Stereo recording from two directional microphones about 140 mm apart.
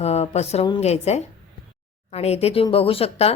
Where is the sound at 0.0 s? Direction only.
50° left (ahead or behind).